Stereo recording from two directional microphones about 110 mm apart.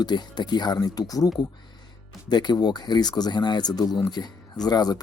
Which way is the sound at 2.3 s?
40° left (ahead or behind).